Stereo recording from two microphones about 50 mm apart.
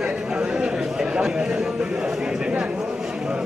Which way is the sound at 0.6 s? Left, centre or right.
Centre.